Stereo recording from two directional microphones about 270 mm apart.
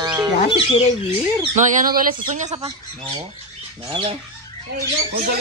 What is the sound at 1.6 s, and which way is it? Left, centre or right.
Speech, right.